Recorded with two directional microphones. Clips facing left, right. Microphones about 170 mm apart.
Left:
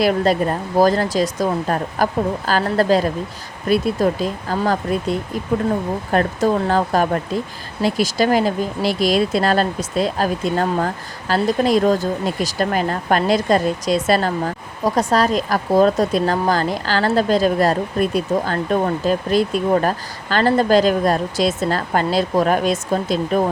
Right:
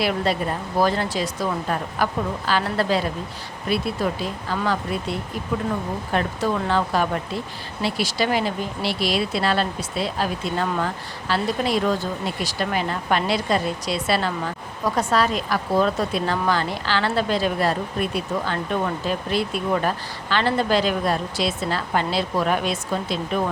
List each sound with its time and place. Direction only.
0.0 s speech: 45° left (ahead or behind)